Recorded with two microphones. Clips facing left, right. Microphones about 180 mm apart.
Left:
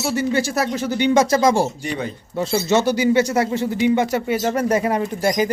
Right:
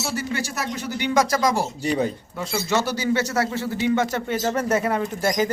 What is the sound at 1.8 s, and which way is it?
Speech, 35° right (ahead or behind).